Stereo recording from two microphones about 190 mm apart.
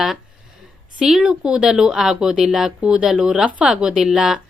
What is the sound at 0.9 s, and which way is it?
A woman's voice, 5° right (ahead or behind).